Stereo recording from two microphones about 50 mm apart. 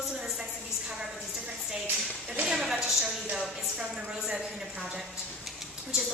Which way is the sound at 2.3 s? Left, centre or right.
Right.